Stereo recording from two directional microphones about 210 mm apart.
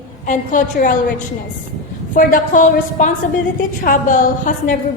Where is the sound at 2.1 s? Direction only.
40° left (ahead or behind).